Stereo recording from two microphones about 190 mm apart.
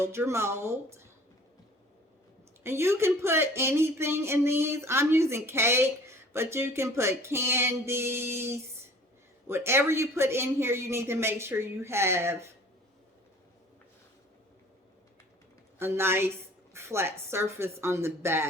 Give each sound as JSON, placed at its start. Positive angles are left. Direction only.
{"t": 0.0, "sound": "speech", "side_deg": -15}
{"t": 2.6, "sound": "speech", "side_deg": -15}
{"t": 15.8, "sound": "speech", "side_deg": -10}